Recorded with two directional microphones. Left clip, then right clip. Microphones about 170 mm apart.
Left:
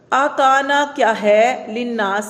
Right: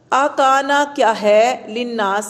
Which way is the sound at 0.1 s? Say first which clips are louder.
Even; 35° right (ahead or behind).